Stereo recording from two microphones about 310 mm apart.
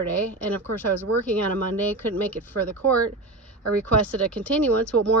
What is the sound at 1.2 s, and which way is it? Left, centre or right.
Speech, centre.